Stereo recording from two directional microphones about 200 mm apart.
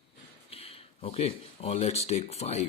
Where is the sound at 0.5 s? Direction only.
30° left (ahead or behind).